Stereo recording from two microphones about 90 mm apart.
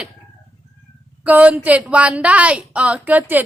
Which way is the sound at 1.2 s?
15° right (ahead or behind).